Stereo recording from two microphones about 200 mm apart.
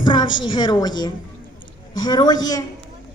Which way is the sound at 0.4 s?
25° left (ahead or behind).